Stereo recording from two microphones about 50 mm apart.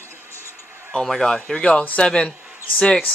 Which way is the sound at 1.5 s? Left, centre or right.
Centre.